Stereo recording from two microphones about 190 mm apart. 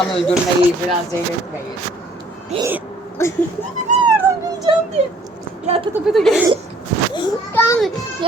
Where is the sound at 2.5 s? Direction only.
30° right (ahead or behind).